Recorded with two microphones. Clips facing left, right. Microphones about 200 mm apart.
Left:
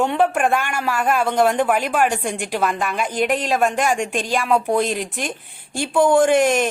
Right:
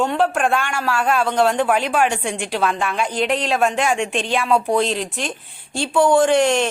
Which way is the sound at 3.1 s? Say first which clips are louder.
Left 1 dB; 50° left (ahead or behind).